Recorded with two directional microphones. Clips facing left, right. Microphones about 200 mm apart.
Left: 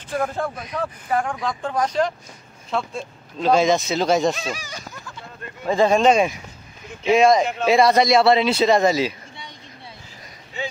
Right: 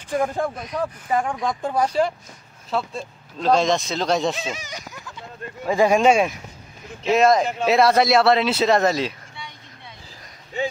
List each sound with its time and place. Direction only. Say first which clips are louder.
0.1 s speech: right 2 dB; 15° right (ahead or behind)
0.6 s speech: right 1 dB; centre (ahead or behind)
1.1 s speech: even; 15° right (ahead or behind); by 4.3 s 5° left (ahead or behind)
4.4 s a sound: even; 20° right (ahead or behind)
5.7 s speech: even; 10° right (ahead or behind)